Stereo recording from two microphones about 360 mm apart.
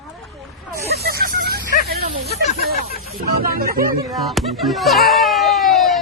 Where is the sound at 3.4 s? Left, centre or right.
Right.